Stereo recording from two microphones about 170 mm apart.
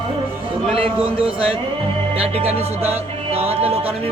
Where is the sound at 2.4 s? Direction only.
40° right (ahead or behind).